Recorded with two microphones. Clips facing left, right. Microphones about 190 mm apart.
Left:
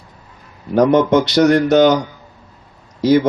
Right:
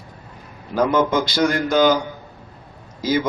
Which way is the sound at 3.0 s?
65° left (ahead or behind).